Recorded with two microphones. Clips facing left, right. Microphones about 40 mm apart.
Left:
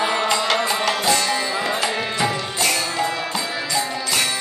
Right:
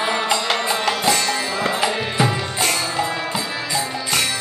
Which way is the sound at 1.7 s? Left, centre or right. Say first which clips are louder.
Right 2 dB; centre.